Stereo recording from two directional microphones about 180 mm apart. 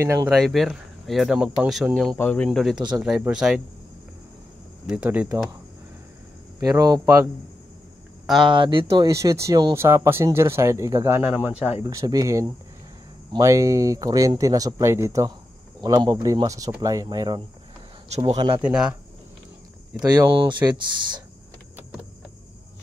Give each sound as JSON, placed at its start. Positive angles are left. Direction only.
{"t": 0.0, "sound": "speech", "side_deg": -15}
{"t": 0.4, "sound": "speech", "side_deg": 0}
{"t": 4.8, "sound": "speech", "side_deg": -5}
{"t": 6.6, "sound": "speech", "side_deg": -20}
{"t": 8.5, "sound": "speech", "side_deg": -25}
{"t": 18.6, "sound": "speech", "side_deg": -5}
{"t": 20.4, "sound": "speech", "side_deg": -25}